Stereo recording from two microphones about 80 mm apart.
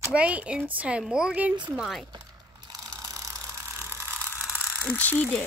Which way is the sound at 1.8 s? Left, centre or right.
Centre.